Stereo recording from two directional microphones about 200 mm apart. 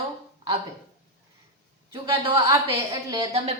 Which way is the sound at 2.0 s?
15° right (ahead or behind).